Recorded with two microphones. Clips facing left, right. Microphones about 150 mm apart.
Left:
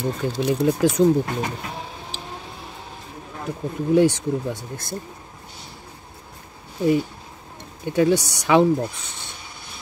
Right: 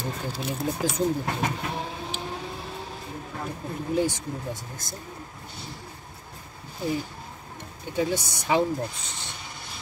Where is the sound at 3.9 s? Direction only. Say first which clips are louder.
Left 9 dB; 75° left (ahead or behind).